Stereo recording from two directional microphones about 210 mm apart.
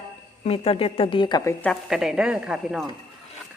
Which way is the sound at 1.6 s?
Centre (ahead or behind).